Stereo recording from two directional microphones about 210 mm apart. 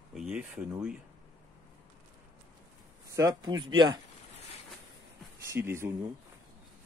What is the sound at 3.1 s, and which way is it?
Speech, 20° right (ahead or behind).